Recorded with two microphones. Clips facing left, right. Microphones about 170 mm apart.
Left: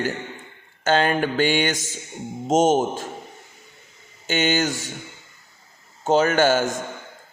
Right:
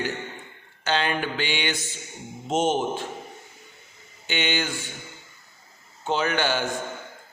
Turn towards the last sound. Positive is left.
turn(degrees=45)  # may be behind; listen again after turning